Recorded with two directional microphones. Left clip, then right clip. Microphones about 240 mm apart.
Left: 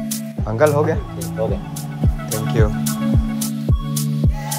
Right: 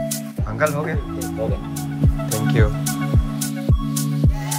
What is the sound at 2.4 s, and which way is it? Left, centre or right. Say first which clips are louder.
Music: left 1 dB; centre.